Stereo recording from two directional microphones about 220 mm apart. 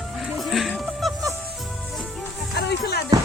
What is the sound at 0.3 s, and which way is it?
Music, centre (ahead or behind).